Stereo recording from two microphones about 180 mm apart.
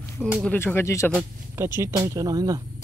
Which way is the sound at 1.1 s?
10° right (ahead or behind).